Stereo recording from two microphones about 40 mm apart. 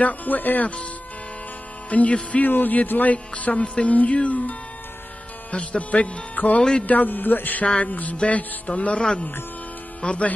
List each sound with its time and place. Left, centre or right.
0.0 s a man's voice: left
1.9 s speech: left
2.4 s a man's voice: left
7.6 s speech: left
10.0 s speech: left